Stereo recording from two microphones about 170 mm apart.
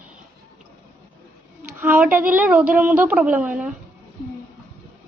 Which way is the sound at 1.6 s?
10° right (ahead or behind).